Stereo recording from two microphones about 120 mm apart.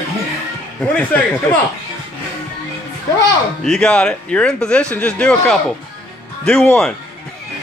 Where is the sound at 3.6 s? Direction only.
5° left (ahead or behind).